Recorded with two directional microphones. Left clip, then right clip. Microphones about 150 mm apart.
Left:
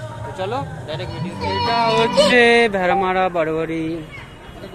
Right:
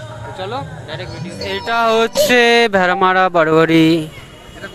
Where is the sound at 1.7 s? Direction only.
80° right; by 4.0 s 60° right (ahead or behind).